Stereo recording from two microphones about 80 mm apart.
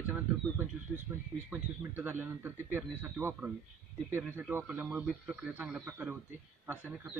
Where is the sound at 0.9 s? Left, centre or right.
Centre.